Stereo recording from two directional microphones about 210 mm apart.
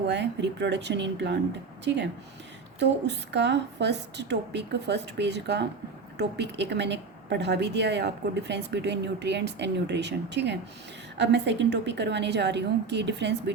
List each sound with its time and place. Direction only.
0.1 s a woman's voice: 55° right (ahead or behind)
2.7 s a woman's voice: 55° right (ahead or behind)